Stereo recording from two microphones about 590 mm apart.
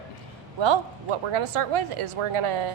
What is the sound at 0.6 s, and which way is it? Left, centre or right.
A woman's voice, right.